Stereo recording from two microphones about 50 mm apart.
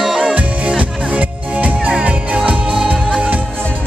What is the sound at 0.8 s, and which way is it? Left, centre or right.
Music, right.